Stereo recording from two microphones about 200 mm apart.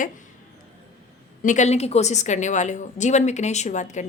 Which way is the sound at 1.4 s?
40° left (ahead or behind).